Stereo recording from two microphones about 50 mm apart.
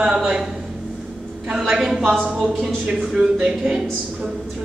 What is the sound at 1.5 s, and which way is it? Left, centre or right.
A woman's voice, centre.